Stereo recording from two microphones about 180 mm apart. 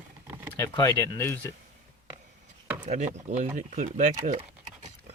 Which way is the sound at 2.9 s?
40° right (ahead or behind).